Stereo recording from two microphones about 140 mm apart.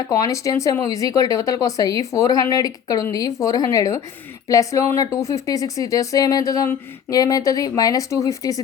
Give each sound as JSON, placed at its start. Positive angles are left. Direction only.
{"t": 0.1, "sound": "speech", "side_deg": 25}